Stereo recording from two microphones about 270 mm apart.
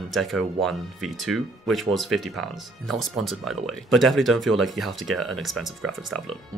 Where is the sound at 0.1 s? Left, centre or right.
Centre.